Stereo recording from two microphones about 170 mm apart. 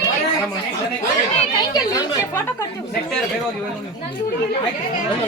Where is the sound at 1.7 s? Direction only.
25° left (ahead or behind).